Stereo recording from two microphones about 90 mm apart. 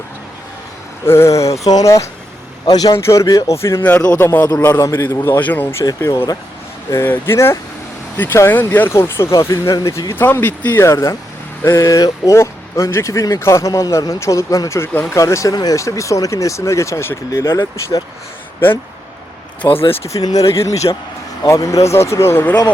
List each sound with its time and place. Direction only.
1.0 s speech: 30° left (ahead or behind); by 2.9 s 45° left (ahead or behind)
2.9 s speech: 35° left (ahead or behind)
3.8 s speech: 15° left (ahead or behind)
4.8 s speech: 30° left (ahead or behind)
5.4 s speech: 20° left (ahead or behind)
6.0 s speech: 30° left (ahead or behind)
10.2 s speech: 25° left (ahead or behind)
10.8 s speech: 30° left (ahead or behind)
19.6 s speech: 35° left (ahead or behind)